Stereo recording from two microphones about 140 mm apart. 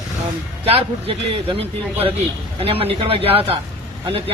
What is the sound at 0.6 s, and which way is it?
A man's voice, 45° right (ahead or behind).